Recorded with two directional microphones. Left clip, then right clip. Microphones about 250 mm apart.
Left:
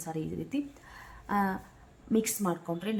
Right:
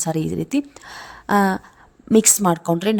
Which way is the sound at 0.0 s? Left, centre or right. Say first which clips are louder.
Right 13 dB; right.